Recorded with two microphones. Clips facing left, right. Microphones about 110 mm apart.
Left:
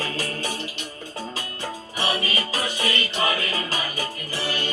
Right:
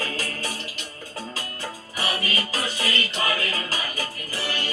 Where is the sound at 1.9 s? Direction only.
25° left (ahead or behind).